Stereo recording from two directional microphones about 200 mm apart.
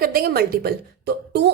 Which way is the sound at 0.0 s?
50° right (ahead or behind).